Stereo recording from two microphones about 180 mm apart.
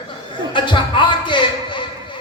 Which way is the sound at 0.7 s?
25° left (ahead or behind).